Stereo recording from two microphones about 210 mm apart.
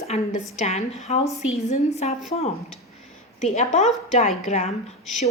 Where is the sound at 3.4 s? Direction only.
30° left (ahead or behind).